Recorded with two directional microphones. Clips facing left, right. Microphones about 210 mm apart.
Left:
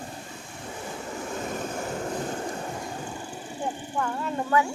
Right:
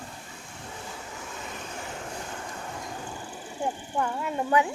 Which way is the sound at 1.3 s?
50° left (ahead or behind).